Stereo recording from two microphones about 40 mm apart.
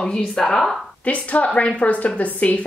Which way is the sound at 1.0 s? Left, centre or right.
Left.